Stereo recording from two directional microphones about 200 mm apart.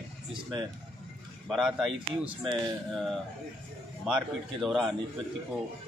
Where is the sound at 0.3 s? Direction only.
20° right (ahead or behind).